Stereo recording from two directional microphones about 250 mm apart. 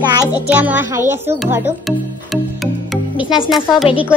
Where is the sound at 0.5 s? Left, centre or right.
Centre.